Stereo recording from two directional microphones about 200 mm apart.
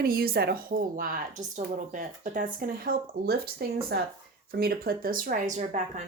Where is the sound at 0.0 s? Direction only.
50° right (ahead or behind).